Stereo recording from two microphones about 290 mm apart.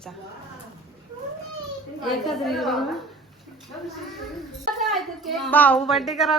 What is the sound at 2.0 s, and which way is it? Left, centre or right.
Speech, centre.